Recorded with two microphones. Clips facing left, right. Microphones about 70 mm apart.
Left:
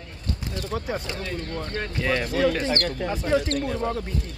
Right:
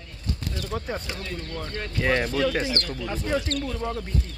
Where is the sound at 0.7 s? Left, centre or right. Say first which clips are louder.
Left 2 dB; centre.